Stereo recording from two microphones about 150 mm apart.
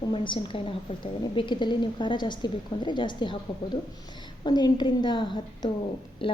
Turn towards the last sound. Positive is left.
turn(degrees=35)  # may be behind; listen again after turning